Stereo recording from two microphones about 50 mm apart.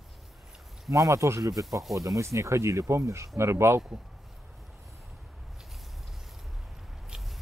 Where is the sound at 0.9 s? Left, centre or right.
Right.